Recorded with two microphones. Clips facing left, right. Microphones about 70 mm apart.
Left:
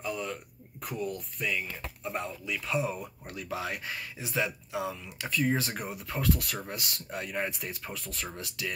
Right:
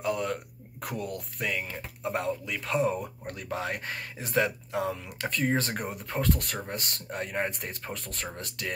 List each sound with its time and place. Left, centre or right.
0.0 s speech: right